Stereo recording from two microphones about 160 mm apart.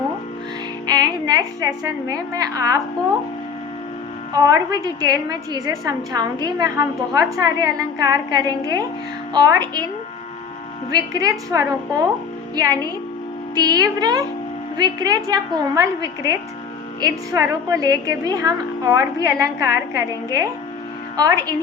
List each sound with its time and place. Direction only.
0.9 s a woman's voice: 25° right (ahead or behind)
4.4 s a woman's voice: 25° right (ahead or behind)
10.9 s a woman's voice: 25° right (ahead or behind)